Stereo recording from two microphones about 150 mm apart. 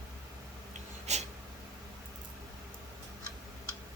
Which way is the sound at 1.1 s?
50° right (ahead or behind).